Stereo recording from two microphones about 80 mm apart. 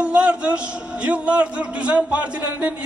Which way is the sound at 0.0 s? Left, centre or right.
Centre.